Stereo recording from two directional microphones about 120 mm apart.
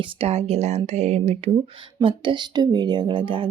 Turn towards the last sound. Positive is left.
turn(degrees=-45)  # may be behind; listen again after turning